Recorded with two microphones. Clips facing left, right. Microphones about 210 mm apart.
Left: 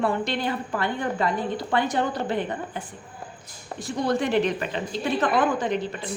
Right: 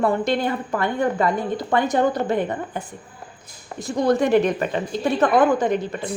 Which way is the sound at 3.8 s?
45° right (ahead or behind).